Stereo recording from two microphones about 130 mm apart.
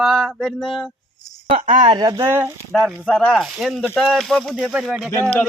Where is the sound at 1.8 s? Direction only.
35° right (ahead or behind).